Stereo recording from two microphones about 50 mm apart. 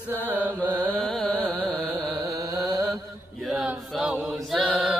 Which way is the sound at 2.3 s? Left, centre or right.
Right.